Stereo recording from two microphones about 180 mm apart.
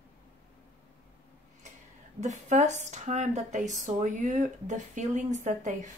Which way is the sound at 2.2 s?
40° right (ahead or behind).